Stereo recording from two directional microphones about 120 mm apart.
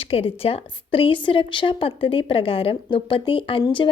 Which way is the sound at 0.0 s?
50° left (ahead or behind).